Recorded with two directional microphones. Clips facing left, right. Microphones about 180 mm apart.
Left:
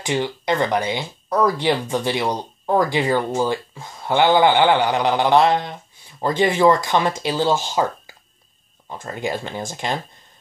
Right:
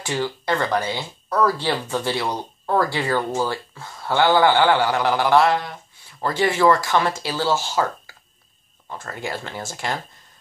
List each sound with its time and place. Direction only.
0.0 s speech: 20° left (ahead or behind)